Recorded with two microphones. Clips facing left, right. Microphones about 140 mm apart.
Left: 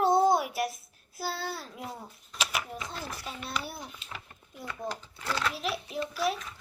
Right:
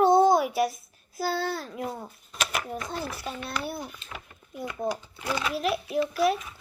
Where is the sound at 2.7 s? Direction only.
50° right (ahead or behind).